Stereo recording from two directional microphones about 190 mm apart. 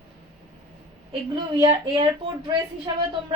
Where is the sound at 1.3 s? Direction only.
25° right (ahead or behind).